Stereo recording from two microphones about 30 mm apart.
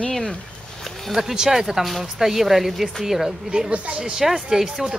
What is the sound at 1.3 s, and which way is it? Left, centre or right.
Speech, centre.